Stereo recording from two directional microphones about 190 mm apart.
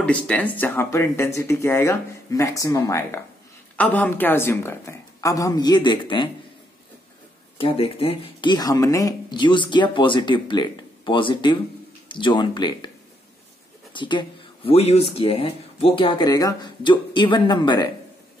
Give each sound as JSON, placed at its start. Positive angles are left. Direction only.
{"t": 0.0, "sound": "speech", "side_deg": 5}
{"t": 7.5, "sound": "speech", "side_deg": 30}
{"t": 13.9, "sound": "speech", "side_deg": 25}